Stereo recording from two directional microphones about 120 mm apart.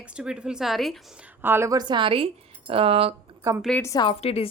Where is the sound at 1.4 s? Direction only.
20° right (ahead or behind); by 3.2 s 50° right (ahead or behind).